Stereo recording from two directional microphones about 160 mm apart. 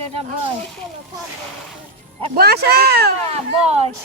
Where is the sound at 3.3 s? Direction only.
40° right (ahead or behind).